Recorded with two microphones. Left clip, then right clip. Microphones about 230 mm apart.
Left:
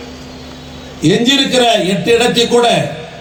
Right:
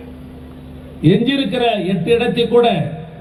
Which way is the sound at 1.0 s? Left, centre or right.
Left.